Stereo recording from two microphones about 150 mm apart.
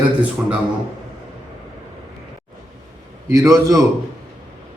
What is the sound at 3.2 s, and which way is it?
Speech, 20° right (ahead or behind).